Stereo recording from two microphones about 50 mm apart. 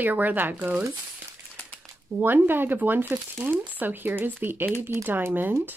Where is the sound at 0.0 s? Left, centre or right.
Right.